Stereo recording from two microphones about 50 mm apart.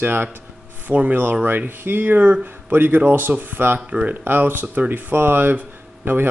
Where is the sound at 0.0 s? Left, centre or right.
Right.